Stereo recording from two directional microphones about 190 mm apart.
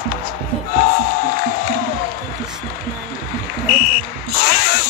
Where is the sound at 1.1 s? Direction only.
50° left (ahead or behind).